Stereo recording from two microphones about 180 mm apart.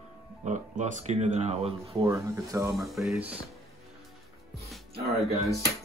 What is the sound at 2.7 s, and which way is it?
Speech, centre (ahead or behind).